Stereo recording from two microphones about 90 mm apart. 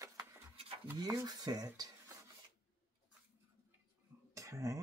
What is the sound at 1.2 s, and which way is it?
Speech, 50° right (ahead or behind).